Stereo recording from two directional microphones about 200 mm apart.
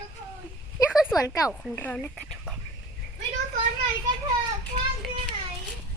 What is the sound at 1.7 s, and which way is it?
Speech, 10° left (ahead or behind).